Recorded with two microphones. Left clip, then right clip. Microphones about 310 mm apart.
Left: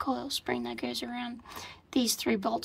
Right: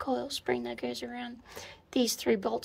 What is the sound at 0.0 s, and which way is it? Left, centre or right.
A woman's voice, centre.